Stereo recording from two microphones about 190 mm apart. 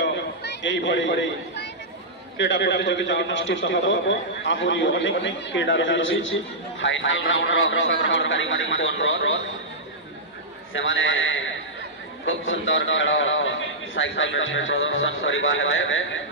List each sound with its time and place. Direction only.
0.4 s chatter: 70° left (ahead or behind)
2.3 s a man's voice: 70° left (ahead or behind)
10.7 s a man's voice: 90° left